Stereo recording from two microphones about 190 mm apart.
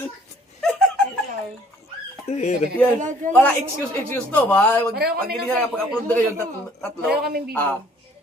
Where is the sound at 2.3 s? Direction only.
35° left (ahead or behind).